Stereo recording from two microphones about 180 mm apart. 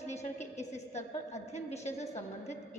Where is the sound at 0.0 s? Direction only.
40° left (ahead or behind).